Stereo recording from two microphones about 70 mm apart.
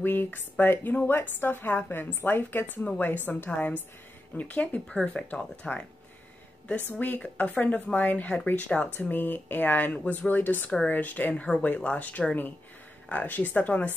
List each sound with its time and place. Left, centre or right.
0.0 s speech: left
6.9 s speech: left